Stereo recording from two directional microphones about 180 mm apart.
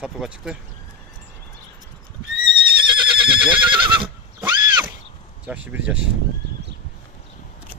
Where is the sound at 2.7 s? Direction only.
25° right (ahead or behind).